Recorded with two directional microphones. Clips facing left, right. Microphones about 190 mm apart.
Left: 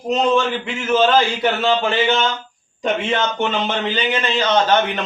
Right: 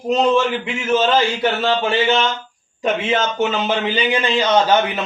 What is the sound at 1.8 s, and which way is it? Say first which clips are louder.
A man's voice: right 1 dB; 10° right (ahead or behind).